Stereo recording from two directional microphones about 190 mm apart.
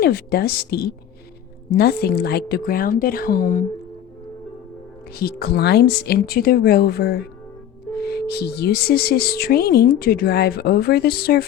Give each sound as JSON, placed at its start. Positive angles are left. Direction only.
{"t": 0.0, "sound": "speech", "side_deg": 55}
{"t": 5.1, "sound": "speech", "side_deg": 55}